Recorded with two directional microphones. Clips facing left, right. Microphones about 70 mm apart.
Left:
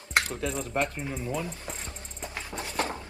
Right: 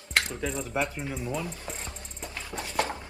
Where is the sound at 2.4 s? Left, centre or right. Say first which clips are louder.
Right 1 dB; left.